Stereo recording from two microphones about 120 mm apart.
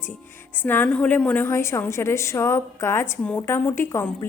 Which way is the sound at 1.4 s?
25° left (ahead or behind).